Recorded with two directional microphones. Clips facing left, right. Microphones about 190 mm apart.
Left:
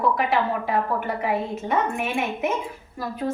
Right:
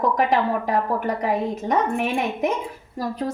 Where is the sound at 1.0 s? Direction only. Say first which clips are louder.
Right 3 dB; 40° right (ahead or behind).